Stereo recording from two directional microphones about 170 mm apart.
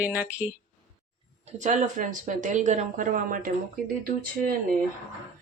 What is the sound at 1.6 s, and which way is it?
Speech, 45° right (ahead or behind).